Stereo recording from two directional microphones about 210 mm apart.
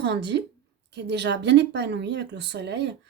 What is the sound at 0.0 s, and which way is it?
Speech, 55° right (ahead or behind).